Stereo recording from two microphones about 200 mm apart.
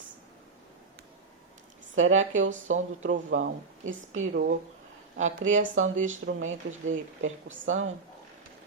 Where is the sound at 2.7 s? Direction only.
90° right.